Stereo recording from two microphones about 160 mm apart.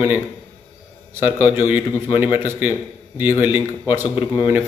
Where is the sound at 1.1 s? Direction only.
15° right (ahead or behind).